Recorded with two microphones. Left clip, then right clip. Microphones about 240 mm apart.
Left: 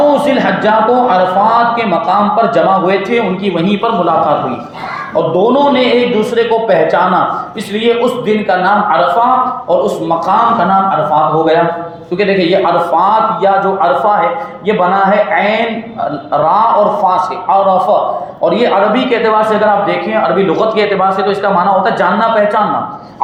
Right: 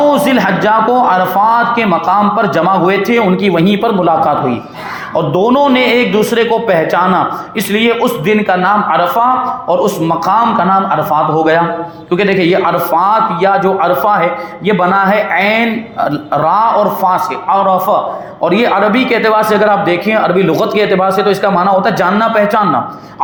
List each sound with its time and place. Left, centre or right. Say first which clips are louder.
0.0 s a man's voice: even; right
12.1 s a man's voice: even; right